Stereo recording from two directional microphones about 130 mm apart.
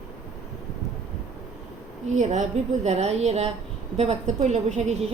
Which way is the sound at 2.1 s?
65° right (ahead or behind).